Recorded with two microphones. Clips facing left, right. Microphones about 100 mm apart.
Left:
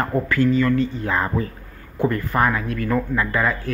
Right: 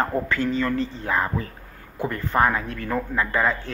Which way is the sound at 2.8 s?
10° right (ahead or behind).